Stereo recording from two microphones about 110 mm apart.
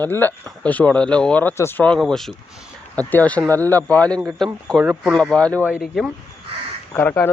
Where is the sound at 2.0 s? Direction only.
Centre (ahead or behind).